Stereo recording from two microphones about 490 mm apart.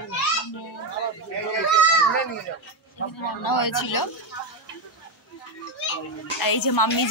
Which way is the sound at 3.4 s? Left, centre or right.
Left.